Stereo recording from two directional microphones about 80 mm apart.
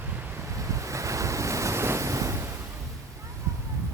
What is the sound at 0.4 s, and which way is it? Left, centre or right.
Waves, right.